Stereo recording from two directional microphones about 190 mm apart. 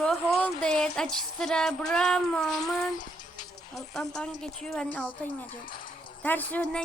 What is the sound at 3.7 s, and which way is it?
Speech, centre (ahead or behind).